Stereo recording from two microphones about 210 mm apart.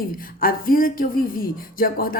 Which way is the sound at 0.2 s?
45° left (ahead or behind).